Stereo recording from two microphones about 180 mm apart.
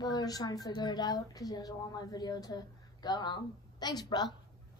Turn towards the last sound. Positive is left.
turn(degrees=25)  # may be behind; listen again after turning